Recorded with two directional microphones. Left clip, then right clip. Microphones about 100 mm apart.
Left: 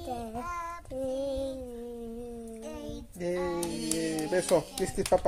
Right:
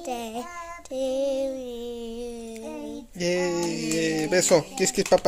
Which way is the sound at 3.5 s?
60° right (ahead or behind).